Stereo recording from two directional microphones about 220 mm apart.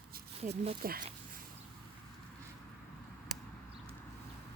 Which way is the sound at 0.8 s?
40° right (ahead or behind).